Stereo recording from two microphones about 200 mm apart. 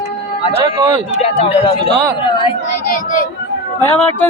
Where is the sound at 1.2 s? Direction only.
30° left (ahead or behind).